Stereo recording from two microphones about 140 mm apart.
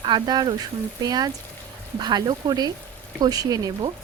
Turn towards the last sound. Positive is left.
turn(degrees=-25)  # may be behind; listen again after turning